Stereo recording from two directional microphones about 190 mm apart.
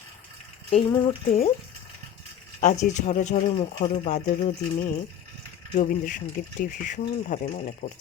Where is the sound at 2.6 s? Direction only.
40° left (ahead or behind).